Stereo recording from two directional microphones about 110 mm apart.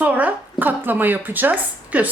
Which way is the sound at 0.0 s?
15° right (ahead or behind).